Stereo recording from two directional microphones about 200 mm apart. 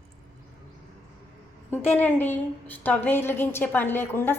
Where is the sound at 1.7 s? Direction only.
10° left (ahead or behind).